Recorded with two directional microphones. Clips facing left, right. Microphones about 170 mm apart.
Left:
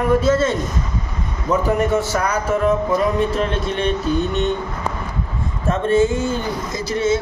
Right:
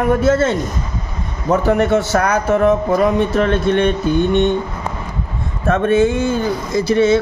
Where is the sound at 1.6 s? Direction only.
70° right (ahead or behind).